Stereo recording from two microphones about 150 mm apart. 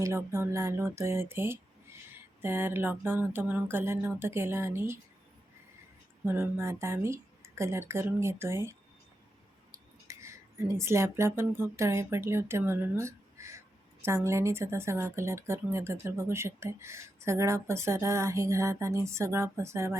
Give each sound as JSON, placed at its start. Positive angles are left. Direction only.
{"t": 0.0, "sound": "speech", "side_deg": -20}
{"t": 6.2, "sound": "speech", "side_deg": -15}
{"t": 10.1, "sound": "speech", "side_deg": -20}